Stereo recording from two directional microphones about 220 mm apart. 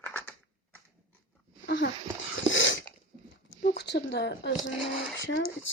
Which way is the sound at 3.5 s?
50° left (ahead or behind).